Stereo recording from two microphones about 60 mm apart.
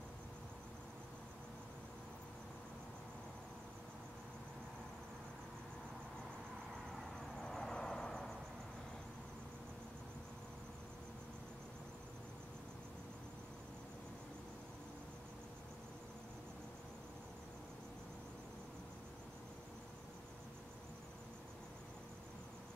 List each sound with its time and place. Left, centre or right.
7.4 s vehicle: centre